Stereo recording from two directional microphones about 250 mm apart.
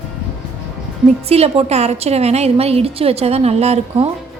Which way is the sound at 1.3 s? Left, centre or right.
Right.